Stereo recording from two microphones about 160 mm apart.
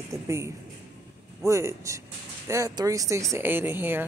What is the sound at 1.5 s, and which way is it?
Speech, 20° right (ahead or behind).